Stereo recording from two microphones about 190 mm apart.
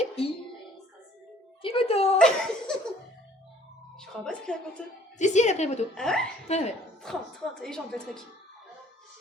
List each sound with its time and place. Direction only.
0.2 s a woman's voice: 30° left (ahead or behind)
1.6 s a woman's voice: 30° left (ahead or behind)
2.1 s speech: 5° left (ahead or behind)
3.9 s speech: 5° left (ahead or behind)
5.1 s a woman's voice: 40° left (ahead or behind)
5.9 s speech: 5° left (ahead or behind)
6.5 s a woman's voice: 35° left (ahead or behind)
7.0 s speech: centre (ahead or behind)